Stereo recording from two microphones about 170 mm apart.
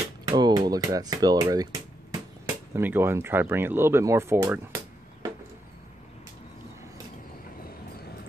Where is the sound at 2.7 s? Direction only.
10° right (ahead or behind).